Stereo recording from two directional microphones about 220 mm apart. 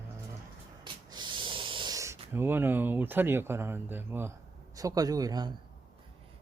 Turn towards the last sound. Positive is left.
turn(degrees=-15)  # may be behind; listen again after turning